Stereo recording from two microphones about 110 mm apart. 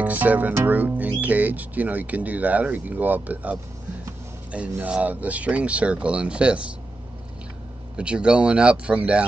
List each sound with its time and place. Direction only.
0.0 s speech: 15° right (ahead or behind)
7.9 s speech: 10° right (ahead or behind)